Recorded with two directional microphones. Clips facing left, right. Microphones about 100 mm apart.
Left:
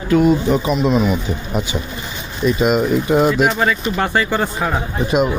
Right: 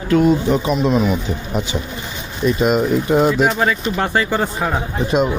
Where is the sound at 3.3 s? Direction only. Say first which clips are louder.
Even; 30° right (ahead or behind).